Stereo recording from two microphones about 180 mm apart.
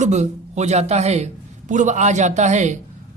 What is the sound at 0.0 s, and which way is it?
A man's voice, 40° right (ahead or behind).